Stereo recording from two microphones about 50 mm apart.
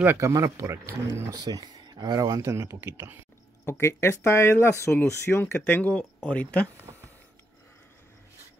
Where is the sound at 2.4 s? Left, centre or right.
Right.